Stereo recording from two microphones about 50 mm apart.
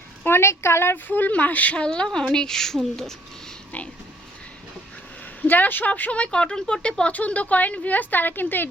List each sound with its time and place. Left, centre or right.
0.3 s a woman's voice: left
1.0 s a woman's voice: left
1.9 s speech: centre
5.4 s speech: left; by 6.7 s centre
7.0 s a woman's voice: left